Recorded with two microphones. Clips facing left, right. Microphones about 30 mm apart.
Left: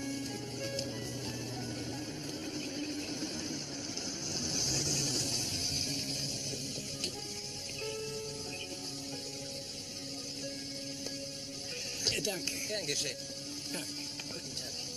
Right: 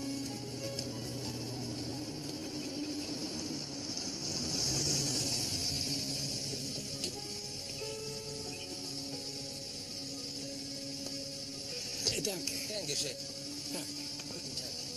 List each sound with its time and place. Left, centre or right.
3.0 s vehicle: left
4.3 s vehicle: left
5.5 s music: left
12.2 s speech: left